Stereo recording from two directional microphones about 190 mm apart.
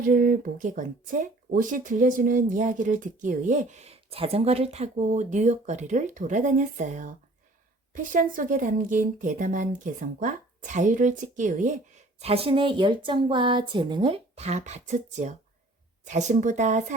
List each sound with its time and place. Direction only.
0.0 s speech: 50° right (ahead or behind)
12.2 s speech: 30° right (ahead or behind)